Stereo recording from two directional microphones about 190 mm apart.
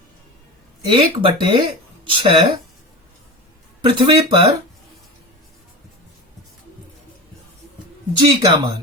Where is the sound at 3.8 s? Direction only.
25° right (ahead or behind).